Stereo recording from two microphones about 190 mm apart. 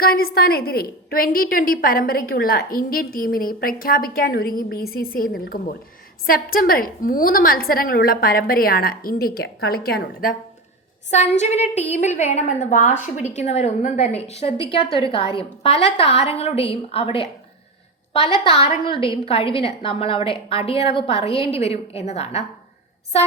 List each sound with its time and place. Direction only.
0.0 s a woman's voice: 50° left (ahead or behind)
11.1 s a woman's voice: 35° left (ahead or behind)
18.4 s a woman's voice: 30° left (ahead or behind)